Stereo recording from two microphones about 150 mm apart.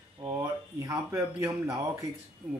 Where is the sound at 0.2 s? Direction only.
25° right (ahead or behind).